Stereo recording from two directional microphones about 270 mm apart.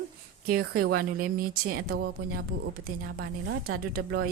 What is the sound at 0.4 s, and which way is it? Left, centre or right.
A woman's voice, right.